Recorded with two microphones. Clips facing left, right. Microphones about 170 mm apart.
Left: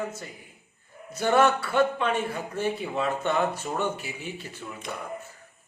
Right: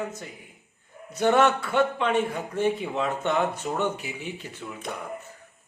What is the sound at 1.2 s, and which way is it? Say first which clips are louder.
Speech: right 1 dB; 10° left (ahead or behind).